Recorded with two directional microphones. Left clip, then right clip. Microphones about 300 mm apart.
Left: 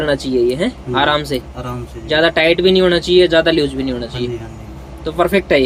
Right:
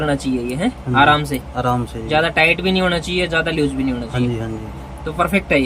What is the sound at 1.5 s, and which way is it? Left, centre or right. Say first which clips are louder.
Speech: right 8 dB; centre.